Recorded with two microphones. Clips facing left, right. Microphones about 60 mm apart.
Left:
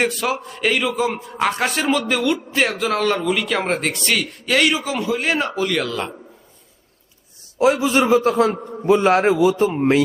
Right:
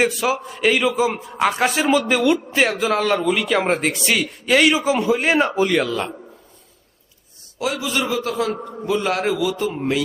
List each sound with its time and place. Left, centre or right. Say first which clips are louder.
0.0 s a man's voice: right 1 dB; centre
4.9 s a man's voice: right 3 dB; centre
5.8 s a man's voice: right 2 dB; centre
7.6 s a man's voice: left 7 dB; left
9.4 s a man's voice: left 6 dB; left